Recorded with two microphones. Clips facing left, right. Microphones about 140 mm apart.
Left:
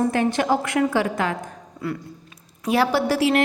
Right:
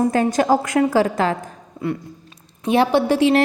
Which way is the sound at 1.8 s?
20° right (ahead or behind).